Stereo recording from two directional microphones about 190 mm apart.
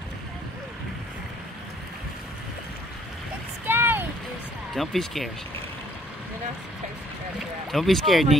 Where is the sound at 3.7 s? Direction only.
10° right (ahead or behind).